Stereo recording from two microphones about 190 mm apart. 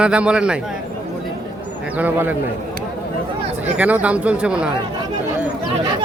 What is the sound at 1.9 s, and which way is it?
Speech, 10° right (ahead or behind).